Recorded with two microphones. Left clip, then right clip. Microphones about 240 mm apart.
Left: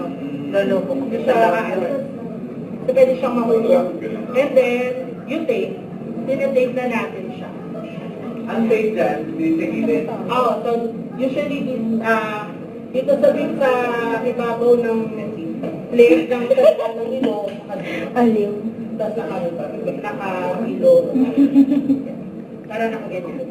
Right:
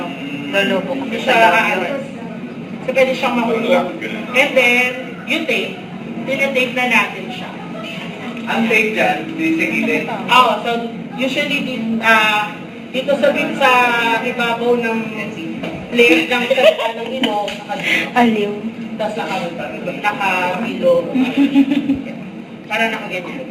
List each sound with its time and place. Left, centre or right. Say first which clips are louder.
0.5 s a woman's voice: right 1 dB; centre
2.9 s a woman's voice: even; centre
8.4 s speech: right 3 dB; centre
11.9 s a woman's voice: right 9 dB; centre
20.1 s a woman's voice: right 10 dB; centre
22.7 s a woman's voice: right 5 dB; centre